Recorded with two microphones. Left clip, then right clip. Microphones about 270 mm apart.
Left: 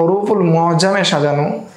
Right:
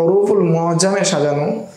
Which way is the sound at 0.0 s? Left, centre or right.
Left.